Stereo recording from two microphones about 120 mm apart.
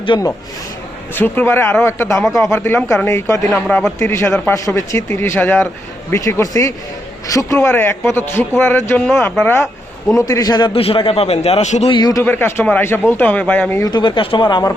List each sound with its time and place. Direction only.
0.1 s speech: 40° left (ahead or behind)
1.1 s a man's voice: 15° left (ahead or behind)
3.5 s a man's voice: 10° left (ahead or behind)
4.0 s a man's voice: 20° left (ahead or behind); by 9.5 s 5° left (ahead or behind)
10.2 s speech: 30° left (ahead or behind)
10.8 s a man's voice: 50° left (ahead or behind); by 11.9 s 70° left (ahead or behind)
11.9 s speech: 35° left (ahead or behind)
12.2 s a man's voice: 15° left (ahead or behind)
13.8 s speech: 40° left (ahead or behind)